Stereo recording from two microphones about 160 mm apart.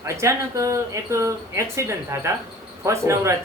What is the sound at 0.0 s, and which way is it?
Speech, 20° right (ahead or behind).